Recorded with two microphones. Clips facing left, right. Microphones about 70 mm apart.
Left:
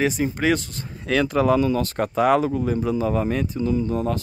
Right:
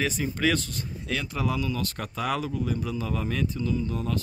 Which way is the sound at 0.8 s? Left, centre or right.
Left.